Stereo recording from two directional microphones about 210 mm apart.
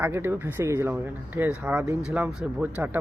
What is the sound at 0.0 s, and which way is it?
Speech, 10° right (ahead or behind).